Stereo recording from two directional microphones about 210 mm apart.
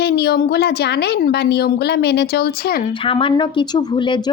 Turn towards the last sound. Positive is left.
turn(degrees=20)  # may be behind; listen again after turning